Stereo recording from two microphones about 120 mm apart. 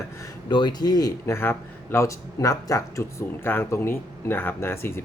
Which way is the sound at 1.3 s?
20° left (ahead or behind).